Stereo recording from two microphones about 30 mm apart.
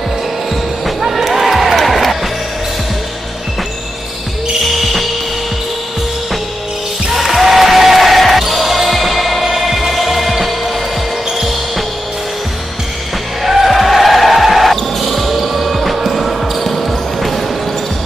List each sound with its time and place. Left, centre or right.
1.0 s a sound: centre
4.6 s music: centre
7.2 s basketball bounce: centre
13.4 s music: centre
13.7 s basketball bounce: centre